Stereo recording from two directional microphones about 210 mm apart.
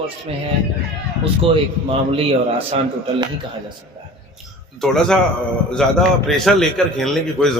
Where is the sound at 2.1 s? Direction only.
25° right (ahead or behind).